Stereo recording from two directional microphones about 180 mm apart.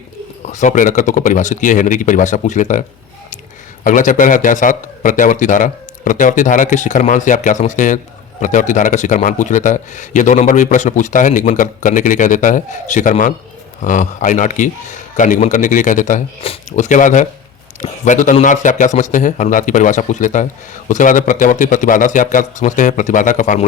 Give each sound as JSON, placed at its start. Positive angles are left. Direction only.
{"t": 0.4, "sound": "a man's voice", "side_deg": 40}
{"t": 3.8, "sound": "a man's voice", "side_deg": 45}